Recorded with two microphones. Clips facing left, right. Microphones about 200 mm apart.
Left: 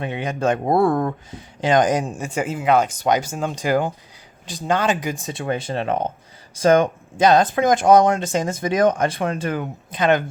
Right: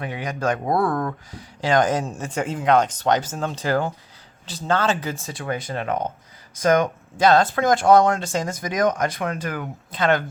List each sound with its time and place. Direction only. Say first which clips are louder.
0.0 s speech: left 3 dB; 25° left (ahead or behind)
7.3 s speech: left 1 dB; 20° left (ahead or behind)